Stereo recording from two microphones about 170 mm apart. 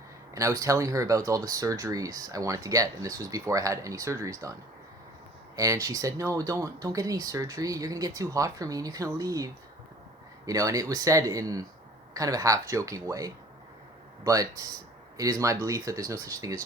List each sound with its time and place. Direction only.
0.3 s speech: 20° right (ahead or behind)
5.5 s speech: 20° right (ahead or behind)